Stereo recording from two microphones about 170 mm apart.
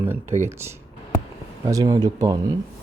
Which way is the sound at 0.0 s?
10° right (ahead or behind).